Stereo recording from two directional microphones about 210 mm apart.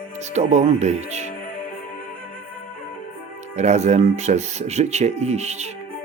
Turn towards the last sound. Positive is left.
turn(degrees=-30)  # may be behind; listen again after turning